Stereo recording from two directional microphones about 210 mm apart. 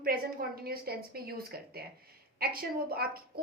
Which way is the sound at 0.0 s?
45° right (ahead or behind).